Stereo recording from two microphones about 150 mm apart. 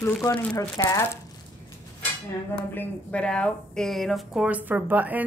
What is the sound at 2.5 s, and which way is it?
A woman's voice, 10° left (ahead or behind).